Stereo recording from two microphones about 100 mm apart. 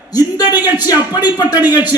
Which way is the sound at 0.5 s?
20° right (ahead or behind).